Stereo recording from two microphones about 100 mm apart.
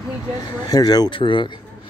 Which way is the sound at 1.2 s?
55° left (ahead or behind).